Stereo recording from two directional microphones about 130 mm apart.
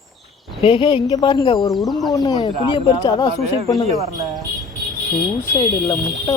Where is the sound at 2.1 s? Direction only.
30° left (ahead or behind).